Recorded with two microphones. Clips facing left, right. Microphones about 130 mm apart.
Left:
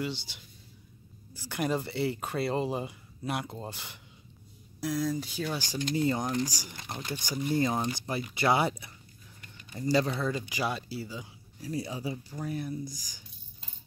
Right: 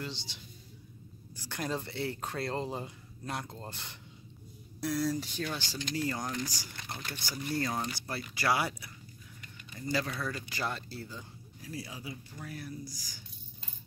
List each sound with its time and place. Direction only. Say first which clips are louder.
0.0 s speech: left 6 dB; 5° left (ahead or behind)
5.9 s speech: left 6 dB; 20° left (ahead or behind)
10.3 s speech: left 5 dB; 15° left (ahead or behind)
11.6 s speech: left 8 dB; 30° left (ahead or behind)